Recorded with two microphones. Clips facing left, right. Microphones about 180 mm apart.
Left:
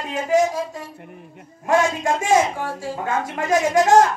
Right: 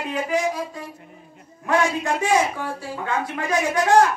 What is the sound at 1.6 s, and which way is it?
A woman's voice, 45° left (ahead or behind).